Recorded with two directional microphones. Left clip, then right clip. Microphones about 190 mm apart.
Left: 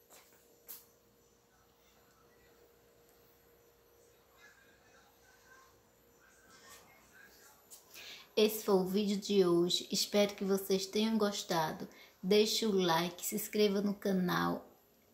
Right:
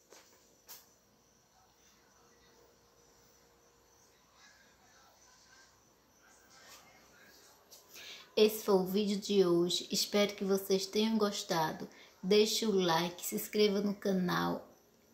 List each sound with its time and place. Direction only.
7.9 s a woman's voice: centre (ahead or behind)